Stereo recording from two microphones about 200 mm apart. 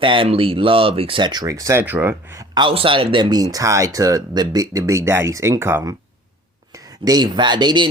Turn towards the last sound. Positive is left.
turn(degrees=-20)  # may be behind; listen again after turning